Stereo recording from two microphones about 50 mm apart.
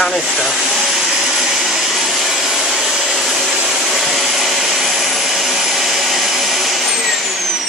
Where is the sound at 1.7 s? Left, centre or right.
Centre.